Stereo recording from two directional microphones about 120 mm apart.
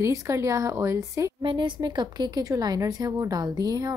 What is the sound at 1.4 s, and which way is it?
A woman's voice, 40° right (ahead or behind).